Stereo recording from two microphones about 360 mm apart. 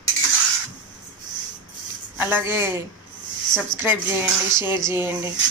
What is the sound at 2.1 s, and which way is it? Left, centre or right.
Speech, centre.